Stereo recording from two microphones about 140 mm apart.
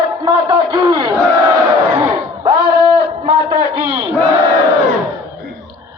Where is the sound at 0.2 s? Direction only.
35° right (ahead or behind).